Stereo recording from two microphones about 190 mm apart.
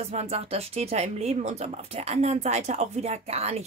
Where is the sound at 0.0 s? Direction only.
35° right (ahead or behind).